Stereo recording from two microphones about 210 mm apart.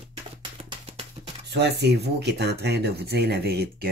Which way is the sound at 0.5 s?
25° right (ahead or behind).